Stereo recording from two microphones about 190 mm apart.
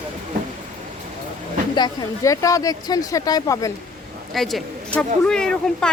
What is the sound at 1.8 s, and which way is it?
Speech, 20° left (ahead or behind).